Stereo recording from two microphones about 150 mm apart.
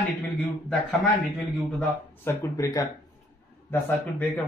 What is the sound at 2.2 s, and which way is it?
Speech, 20° left (ahead or behind).